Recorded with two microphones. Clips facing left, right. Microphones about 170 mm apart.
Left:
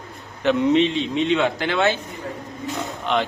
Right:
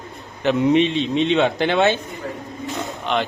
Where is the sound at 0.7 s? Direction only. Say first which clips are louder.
Right 1 dB; 20° right (ahead or behind).